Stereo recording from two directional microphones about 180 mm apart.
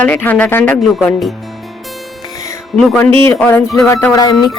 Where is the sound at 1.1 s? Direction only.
Centre (ahead or behind).